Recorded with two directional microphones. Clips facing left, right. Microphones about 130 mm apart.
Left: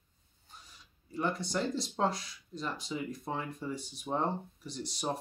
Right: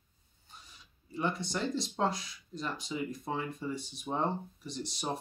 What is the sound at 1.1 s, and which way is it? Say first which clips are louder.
Speech: left 1 dB; centre (ahead or behind).